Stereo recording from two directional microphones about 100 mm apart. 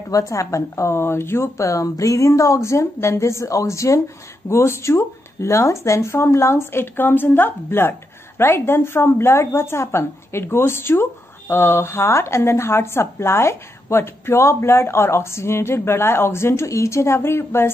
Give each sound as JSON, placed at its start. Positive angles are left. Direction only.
{"t": 0.1, "sound": "a woman's voice", "side_deg": 35}